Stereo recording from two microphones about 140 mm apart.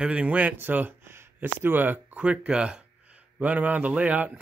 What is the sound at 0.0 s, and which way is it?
Speech, 10° right (ahead or behind).